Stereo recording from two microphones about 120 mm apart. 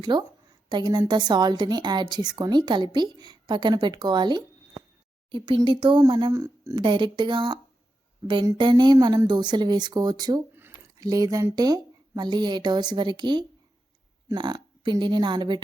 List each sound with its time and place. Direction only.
0.0 s a woman's voice: 40° right (ahead or behind)
6.8 s a woman's voice: 40° right (ahead or behind)
10.5 s a sound: 20° right (ahead or behind)
11.0 s a woman's voice: 30° right (ahead or behind)